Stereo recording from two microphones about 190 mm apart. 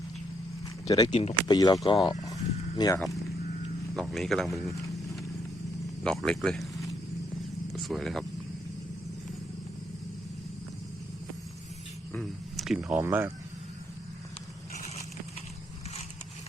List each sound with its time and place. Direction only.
0.9 s speech: 20° left (ahead or behind)
2.2 s a sound: 20° left (ahead or behind)
3.9 s speech: centre (ahead or behind)
6.0 s speech: 5° left (ahead or behind)
7.7 s speech: centre (ahead or behind)
12.1 s speech: centre (ahead or behind)